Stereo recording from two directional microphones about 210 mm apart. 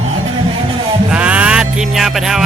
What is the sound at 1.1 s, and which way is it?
Music, 5° right (ahead or behind).